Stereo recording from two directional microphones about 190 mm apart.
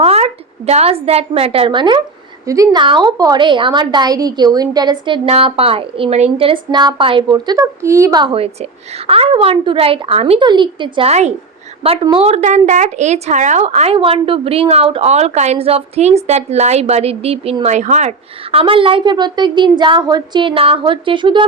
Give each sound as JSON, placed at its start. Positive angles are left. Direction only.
{"t": 0.0, "sound": "a woman's voice", "side_deg": -35}
{"t": 18.5, "sound": "a woman's voice", "side_deg": -25}